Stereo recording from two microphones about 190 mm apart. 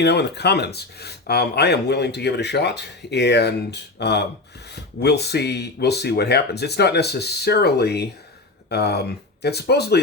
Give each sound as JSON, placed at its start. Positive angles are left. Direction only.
{"t": 0.0, "sound": "speech", "side_deg": 60}